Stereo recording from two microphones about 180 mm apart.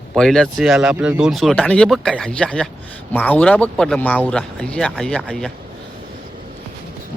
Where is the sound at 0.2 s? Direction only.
Centre (ahead or behind).